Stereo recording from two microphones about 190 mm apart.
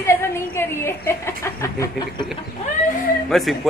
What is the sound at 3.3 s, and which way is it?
Speech, centre (ahead or behind).